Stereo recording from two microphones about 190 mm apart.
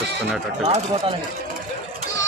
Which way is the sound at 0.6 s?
35° right (ahead or behind).